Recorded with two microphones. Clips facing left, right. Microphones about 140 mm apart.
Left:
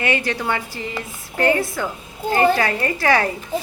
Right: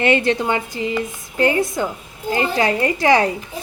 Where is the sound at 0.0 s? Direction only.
25° right (ahead or behind).